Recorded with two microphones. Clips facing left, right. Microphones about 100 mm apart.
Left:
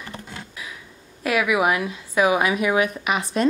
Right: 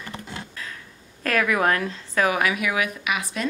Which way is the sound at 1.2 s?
10° left (ahead or behind).